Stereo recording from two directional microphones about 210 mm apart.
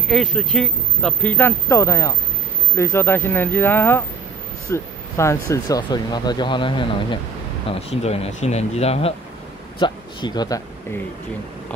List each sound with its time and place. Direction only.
0.1 s speech: centre (ahead or behind); by 10.6 s 20° left (ahead or behind)